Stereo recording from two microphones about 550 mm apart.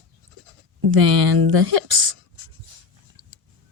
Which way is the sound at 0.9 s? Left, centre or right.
Right.